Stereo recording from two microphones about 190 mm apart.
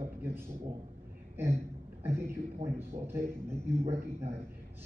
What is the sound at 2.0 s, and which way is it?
A man's voice, 15° right (ahead or behind).